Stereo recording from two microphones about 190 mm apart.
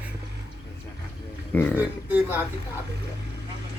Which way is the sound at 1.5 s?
10° left (ahead or behind).